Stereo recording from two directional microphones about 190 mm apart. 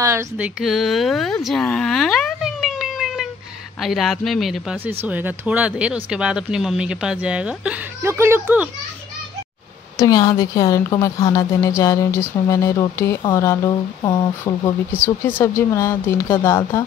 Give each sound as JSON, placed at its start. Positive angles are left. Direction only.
{"t": 0.0, "sound": "speech", "side_deg": -15}
{"t": 9.9, "sound": "a woman's voice", "side_deg": 20}